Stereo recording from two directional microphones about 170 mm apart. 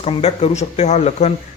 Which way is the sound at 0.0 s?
35° left (ahead or behind).